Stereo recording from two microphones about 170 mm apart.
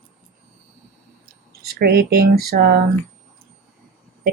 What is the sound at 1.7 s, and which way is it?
Speech, 65° right (ahead or behind).